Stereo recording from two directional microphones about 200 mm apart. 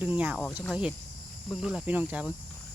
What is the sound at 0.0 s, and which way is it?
Speech, 10° right (ahead or behind).